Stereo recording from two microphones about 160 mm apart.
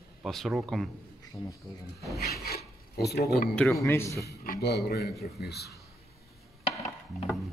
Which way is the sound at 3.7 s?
15° left (ahead or behind).